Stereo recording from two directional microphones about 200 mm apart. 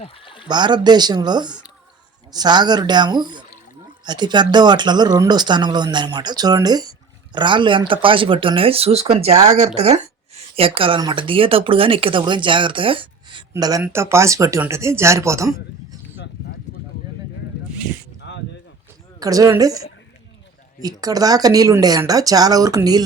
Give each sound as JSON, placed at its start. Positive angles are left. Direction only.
{"t": 0.0, "sound": "speech", "side_deg": 25}
{"t": 0.4, "sound": "speech", "side_deg": -20}
{"t": 9.3, "sound": "speech", "side_deg": -20}
{"t": 9.6, "sound": "speech", "side_deg": -35}
{"t": 18.3, "sound": "a sound", "side_deg": 65}
{"t": 19.2, "sound": "speech", "side_deg": -15}
{"t": 20.8, "sound": "speech", "side_deg": -20}